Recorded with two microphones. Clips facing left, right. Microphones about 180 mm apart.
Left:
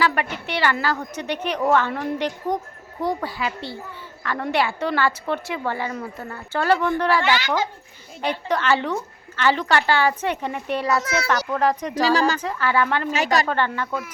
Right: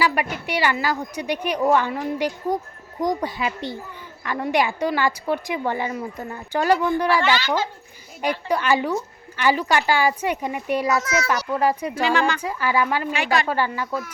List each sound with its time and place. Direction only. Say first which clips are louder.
0.0 s a woman's voice: even; 10° right (ahead or behind)
7.3 s speech: even; 15° left (ahead or behind)
8.2 s a woman's voice: right 1 dB; 10° right (ahead or behind)
11.0 s a woman's voice: right 1 dB; 30° left (ahead or behind)
11.3 s a woman's voice: left 1 dB; 10° right (ahead or behind)
12.0 s a woman's voice: left 1 dB; 35° left (ahead or behind)
12.4 s a woman's voice: even; 10° right (ahead or behind)
13.1 s a woman's voice: left 3 dB; 40° left (ahead or behind)
13.5 s a woman's voice: even; 10° right (ahead or behind)